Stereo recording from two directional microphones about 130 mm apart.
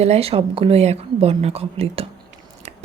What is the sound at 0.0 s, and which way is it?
Speech, 50° right (ahead or behind).